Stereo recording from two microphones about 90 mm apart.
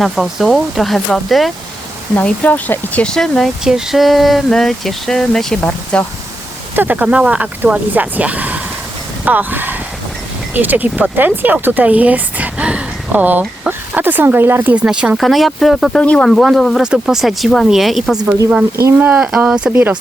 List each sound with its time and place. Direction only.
0.0 s speech: centre (ahead or behind)
2.1 s speech: 15° left (ahead or behind)
3.6 s speech: 5° right (ahead or behind); by 6.1 s 10° left (ahead or behind)
6.7 s speech: 20° right (ahead or behind)
14.8 s speech: 10° right (ahead or behind)
18.9 s speech: 15° right (ahead or behind)
19.2 s speech: 5° right (ahead or behind)
19.6 s speech: 15° right (ahead or behind)